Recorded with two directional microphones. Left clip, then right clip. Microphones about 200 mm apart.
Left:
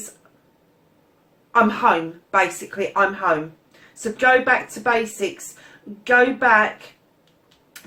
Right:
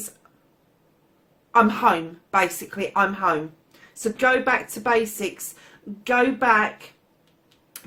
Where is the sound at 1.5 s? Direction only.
45° right (ahead or behind).